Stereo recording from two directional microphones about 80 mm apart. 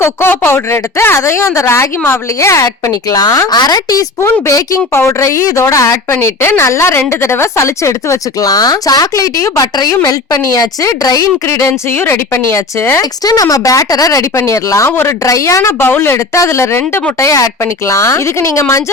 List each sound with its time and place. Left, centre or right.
0.0 s a woman's voice: left
4.2 s a woman's voice: left
13.0 s a woman's voice: left
15.8 s a woman's voice: left